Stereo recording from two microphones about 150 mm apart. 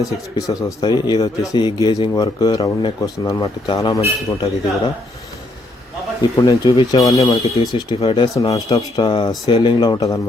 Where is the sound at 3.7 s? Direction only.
35° left (ahead or behind).